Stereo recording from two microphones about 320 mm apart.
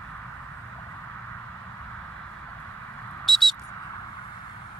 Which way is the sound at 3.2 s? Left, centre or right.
Centre.